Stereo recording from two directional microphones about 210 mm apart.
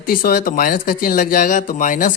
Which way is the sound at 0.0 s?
45° left (ahead or behind).